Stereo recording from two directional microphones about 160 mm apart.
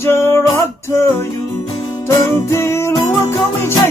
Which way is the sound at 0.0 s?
15° left (ahead or behind).